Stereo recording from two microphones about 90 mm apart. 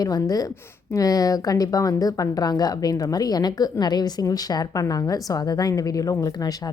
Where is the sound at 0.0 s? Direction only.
45° left (ahead or behind).